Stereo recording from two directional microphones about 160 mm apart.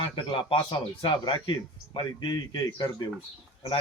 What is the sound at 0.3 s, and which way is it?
A man's voice, 30° left (ahead or behind).